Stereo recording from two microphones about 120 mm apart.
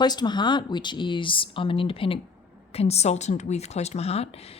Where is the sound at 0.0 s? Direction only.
35° left (ahead or behind).